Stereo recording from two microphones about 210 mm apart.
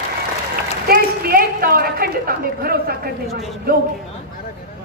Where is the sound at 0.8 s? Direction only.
45° right (ahead or behind).